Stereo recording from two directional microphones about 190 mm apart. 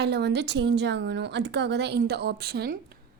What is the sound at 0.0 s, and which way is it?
Speech, 60° right (ahead or behind).